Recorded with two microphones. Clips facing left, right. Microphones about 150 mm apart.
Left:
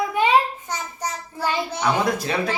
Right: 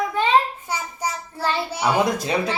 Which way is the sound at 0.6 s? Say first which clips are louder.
Right 2 dB; 10° right (ahead or behind).